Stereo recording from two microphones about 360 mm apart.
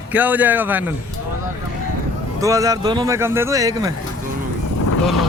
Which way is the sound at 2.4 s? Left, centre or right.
Centre.